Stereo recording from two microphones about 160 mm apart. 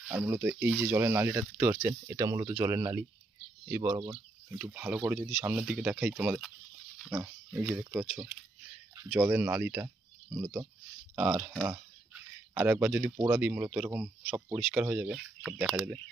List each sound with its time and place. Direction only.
0.0 s speech: 10° right (ahead or behind)
4.5 s speech: 10° right (ahead or behind)
12.1 s a sound: 10° right (ahead or behind)
13.2 s speech: 10° right (ahead or behind)